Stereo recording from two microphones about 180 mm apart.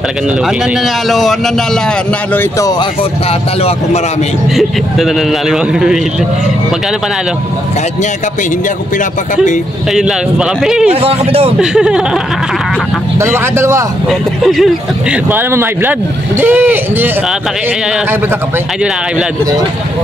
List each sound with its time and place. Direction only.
1.0 s a man's voice: centre (ahead or behind)
2.8 s speech: 30° left (ahead or behind)
4.6 s a man's voice: centre (ahead or behind)
8.9 s speech: 45° left (ahead or behind)
9.9 s a man's voice: 5° right (ahead or behind)
10.9 s a man's voice: 35° right (ahead or behind)
11.6 s a man's voice: 5° right (ahead or behind)
13.2 s speech: 15° right (ahead or behind)
14.0 s a man's voice: centre (ahead or behind)
15.2 s speech: 10° right (ahead or behind)